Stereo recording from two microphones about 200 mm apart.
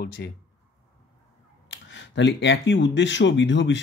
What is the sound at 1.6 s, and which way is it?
Speech, 65° left (ahead or behind).